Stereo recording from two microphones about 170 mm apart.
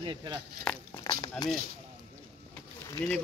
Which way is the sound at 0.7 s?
5° left (ahead or behind).